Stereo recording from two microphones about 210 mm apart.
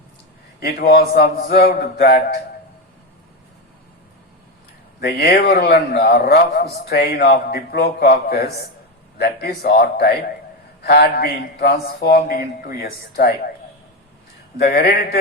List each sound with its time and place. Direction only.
0.6 s a man's voice: 45° left (ahead or behind)
4.9 s a man's voice: 50° left (ahead or behind)
14.6 s a man's voice: 50° left (ahead or behind)